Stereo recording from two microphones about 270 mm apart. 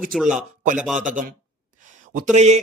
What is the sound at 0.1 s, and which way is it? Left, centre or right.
Speech, centre.